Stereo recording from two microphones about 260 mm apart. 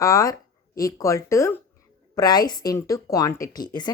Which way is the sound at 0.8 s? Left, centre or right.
Centre.